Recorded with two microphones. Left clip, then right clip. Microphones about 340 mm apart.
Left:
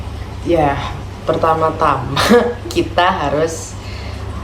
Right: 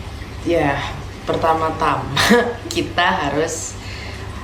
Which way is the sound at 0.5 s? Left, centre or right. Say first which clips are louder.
Left 3 dB; centre.